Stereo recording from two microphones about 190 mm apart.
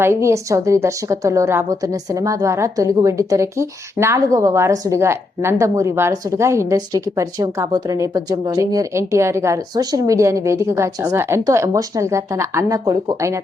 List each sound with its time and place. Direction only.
0.0 s a woman's voice: 15° right (ahead or behind)